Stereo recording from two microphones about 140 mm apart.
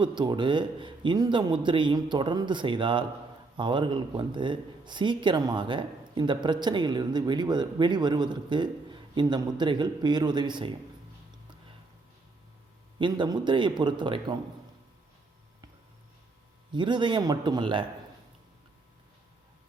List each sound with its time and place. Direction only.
0.0 s speech: 35° right (ahead or behind)
13.0 s speech: 35° right (ahead or behind)
16.7 s speech: 35° right (ahead or behind)